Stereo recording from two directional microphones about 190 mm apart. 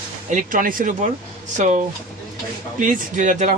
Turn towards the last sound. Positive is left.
turn(degrees=-40)  # may be behind; listen again after turning